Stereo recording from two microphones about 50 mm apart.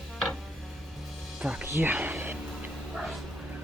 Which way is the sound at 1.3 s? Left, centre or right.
Centre.